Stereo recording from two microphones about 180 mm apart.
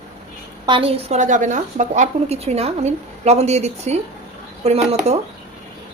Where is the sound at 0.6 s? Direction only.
30° right (ahead or behind).